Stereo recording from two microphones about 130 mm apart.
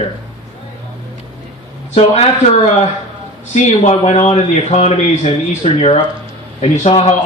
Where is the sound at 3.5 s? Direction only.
60° left (ahead or behind).